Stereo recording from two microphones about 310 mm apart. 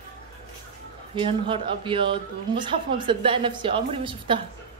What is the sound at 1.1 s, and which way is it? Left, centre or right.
Speech, centre.